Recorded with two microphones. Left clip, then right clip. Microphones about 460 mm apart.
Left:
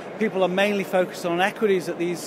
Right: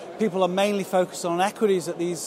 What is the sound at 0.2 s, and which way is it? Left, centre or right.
A man's voice, right.